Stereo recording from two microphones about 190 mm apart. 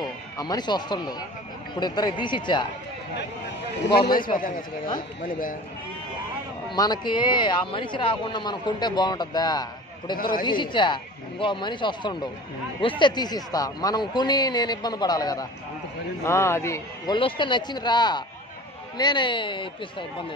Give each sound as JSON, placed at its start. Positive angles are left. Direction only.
{"t": 0.0, "sound": "a man's voice", "side_deg": 20}
{"t": 4.4, "sound": "a man's voice", "side_deg": 45}
{"t": 6.7, "sound": "a man's voice", "side_deg": 20}